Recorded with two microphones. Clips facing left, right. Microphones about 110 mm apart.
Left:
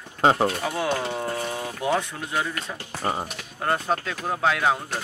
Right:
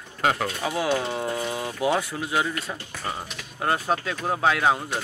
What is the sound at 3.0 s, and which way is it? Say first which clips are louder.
Speech: left 6 dB; 30° left (ahead or behind).